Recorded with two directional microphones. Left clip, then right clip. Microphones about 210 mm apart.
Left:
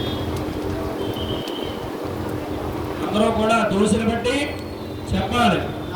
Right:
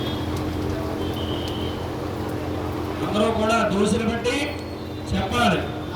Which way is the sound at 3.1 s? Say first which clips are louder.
Left 2 dB; 45° right (ahead or behind).